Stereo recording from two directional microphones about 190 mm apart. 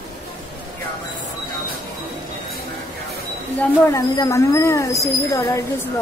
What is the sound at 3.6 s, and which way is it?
A woman's voice, 15° left (ahead or behind).